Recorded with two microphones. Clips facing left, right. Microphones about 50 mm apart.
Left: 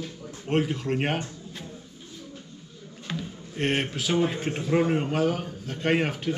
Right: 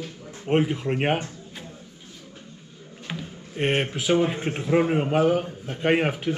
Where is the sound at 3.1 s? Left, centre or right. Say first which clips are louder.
Left 1 dB; centre.